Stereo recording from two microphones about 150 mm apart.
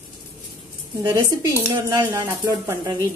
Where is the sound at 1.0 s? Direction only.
20° right (ahead or behind).